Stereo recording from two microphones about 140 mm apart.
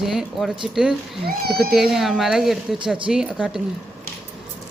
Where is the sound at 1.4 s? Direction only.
90° right.